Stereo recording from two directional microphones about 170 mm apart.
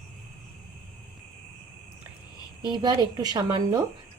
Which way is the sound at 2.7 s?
25° right (ahead or behind).